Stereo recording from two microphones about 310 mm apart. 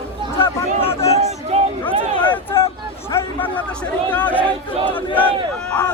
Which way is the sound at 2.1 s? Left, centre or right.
Centre.